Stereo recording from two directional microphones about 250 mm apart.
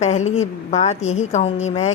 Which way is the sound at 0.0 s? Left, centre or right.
Left.